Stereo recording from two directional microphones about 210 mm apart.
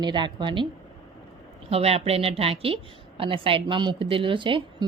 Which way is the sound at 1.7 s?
30° right (ahead or behind).